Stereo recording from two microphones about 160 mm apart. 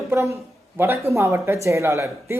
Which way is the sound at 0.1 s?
15° right (ahead or behind).